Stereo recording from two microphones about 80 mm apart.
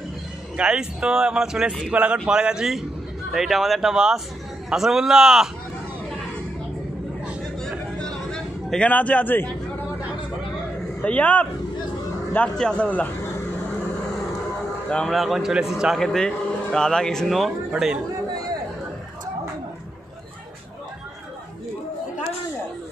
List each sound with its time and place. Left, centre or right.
0.6 s a man's voice: centre
8.0 s a sound: centre
11.0 s speech: centre
12.5 s a man's voice: centre
14.9 s a man's voice: centre
16.0 s a man's voice: centre